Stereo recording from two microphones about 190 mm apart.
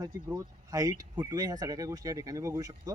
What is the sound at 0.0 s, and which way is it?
Speech, 15° right (ahead or behind).